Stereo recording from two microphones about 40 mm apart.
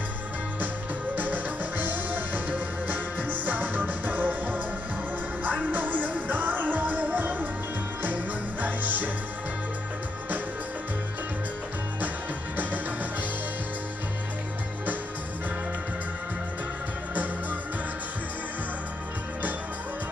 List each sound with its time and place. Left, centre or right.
1.1 s music: right
17.1 s music: right